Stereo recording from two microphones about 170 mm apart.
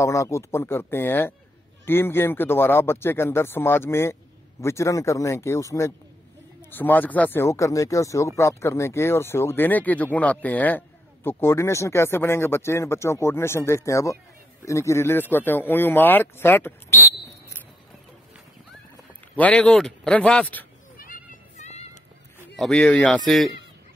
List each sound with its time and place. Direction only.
0.0 s speech: 15° left (ahead or behind)
19.3 s speech: 10° left (ahead or behind)
21.0 s music: 50° left (ahead or behind)
22.6 s a man's voice: 5° left (ahead or behind)